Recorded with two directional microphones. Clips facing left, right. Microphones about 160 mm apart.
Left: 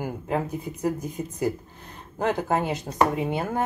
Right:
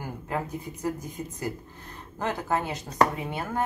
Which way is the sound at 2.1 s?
20° left (ahead or behind).